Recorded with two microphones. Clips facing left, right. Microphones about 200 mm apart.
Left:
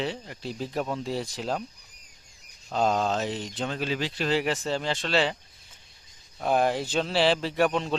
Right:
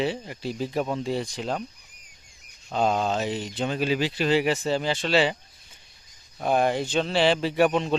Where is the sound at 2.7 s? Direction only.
Centre (ahead or behind).